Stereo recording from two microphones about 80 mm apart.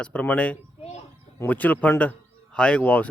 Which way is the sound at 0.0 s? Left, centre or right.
Centre.